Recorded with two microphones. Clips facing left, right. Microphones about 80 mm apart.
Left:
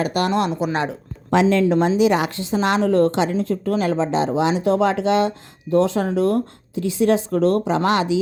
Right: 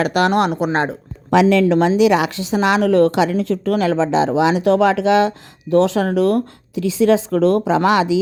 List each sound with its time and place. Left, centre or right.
0.0 s a woman's voice: right
0.6 s speech: right
1.3 s a woman's voice: right
1.6 s speech: right
2.0 s a woman's voice: right